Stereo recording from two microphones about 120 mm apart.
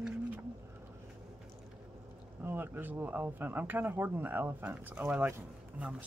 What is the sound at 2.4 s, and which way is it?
Speech, 20° right (ahead or behind).